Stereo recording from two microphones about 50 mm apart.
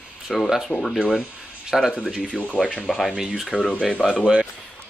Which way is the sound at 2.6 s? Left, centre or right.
Centre.